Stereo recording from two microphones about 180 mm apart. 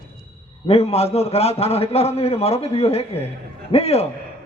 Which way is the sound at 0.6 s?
35° left (ahead or behind).